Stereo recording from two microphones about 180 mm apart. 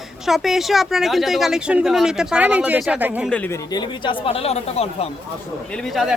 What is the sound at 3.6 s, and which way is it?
Speech, 25° left (ahead or behind).